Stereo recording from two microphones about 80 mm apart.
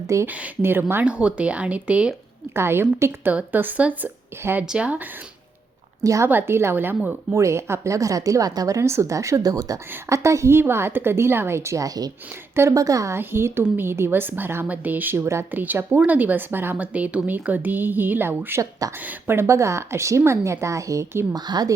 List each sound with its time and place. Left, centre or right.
0.3 s speech: centre
0.6 s a woman's voice: right
1.0 s speech: centre
2.6 s a woman's voice: right
6.0 s a woman's voice: right
6.2 s a woman's voice: right
7.0 s speech: centre
7.3 s a woman's voice: right
10.1 s a woman's voice: right
12.5 s a woman's voice: right
13.1 s a woman's voice: right
21.3 s a woman's voice: right